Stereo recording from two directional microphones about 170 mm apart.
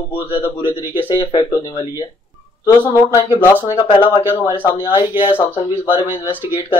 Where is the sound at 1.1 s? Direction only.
25° left (ahead or behind).